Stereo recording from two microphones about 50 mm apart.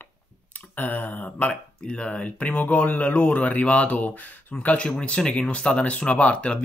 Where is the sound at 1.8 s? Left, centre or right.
Centre.